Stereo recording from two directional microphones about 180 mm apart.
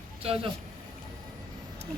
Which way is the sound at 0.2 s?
30° right (ahead or behind).